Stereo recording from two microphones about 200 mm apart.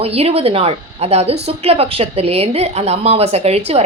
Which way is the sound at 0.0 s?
30° right (ahead or behind).